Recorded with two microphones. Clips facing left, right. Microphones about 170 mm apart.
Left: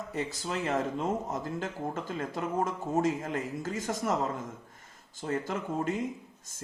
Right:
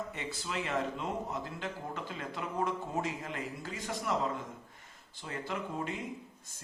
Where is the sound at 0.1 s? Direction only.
40° left (ahead or behind).